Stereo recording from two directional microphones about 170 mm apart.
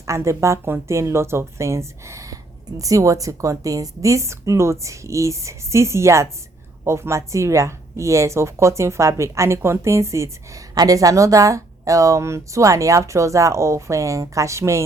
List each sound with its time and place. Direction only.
0.0 s speech: 15° right (ahead or behind)